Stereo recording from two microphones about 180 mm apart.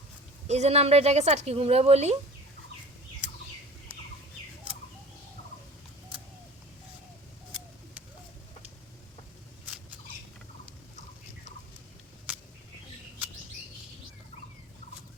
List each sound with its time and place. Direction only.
0.4 s a woman's voice: 40° right (ahead or behind)